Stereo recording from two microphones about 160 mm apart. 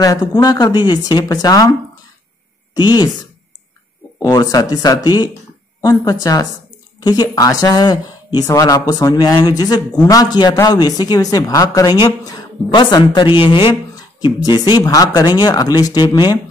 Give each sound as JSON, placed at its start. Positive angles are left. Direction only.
{"t": 0.0, "sound": "speech", "side_deg": 25}
{"t": 2.7, "sound": "speech", "side_deg": 25}
{"t": 4.2, "sound": "a woman's voice", "side_deg": 25}